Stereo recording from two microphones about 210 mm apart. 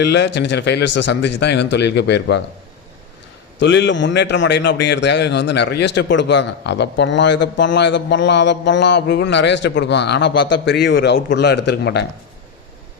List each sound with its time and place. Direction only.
0.0 s a man's voice: 55° left (ahead or behind)
3.6 s a man's voice: 60° left (ahead or behind)